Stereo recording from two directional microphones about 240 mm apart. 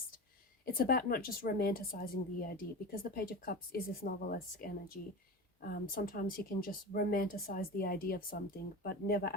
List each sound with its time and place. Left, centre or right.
0.6 s a woman's voice: left